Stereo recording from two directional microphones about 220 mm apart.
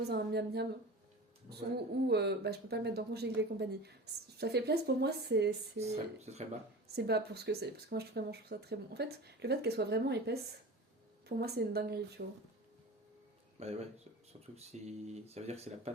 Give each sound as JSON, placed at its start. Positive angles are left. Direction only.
{"t": 0.0, "sound": "speech", "side_deg": -45}
{"t": 6.1, "sound": "speech", "side_deg": -30}
{"t": 6.9, "sound": "speech", "side_deg": -45}
{"t": 13.6, "sound": "speech", "side_deg": -30}